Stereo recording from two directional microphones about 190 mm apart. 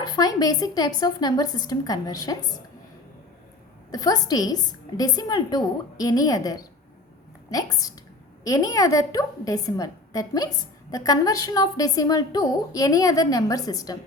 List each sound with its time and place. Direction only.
0.0 s a woman's voice: 20° left (ahead or behind)
3.9 s a woman's voice: 20° left (ahead or behind)